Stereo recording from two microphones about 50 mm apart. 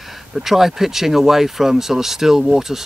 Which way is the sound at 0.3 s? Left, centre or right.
Centre.